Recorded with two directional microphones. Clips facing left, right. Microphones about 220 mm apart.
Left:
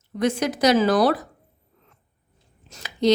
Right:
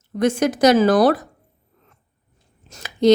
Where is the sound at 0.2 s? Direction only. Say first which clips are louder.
Right 4 dB; 50° right (ahead or behind).